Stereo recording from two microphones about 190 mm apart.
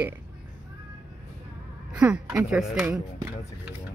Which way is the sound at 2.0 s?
5° right (ahead or behind).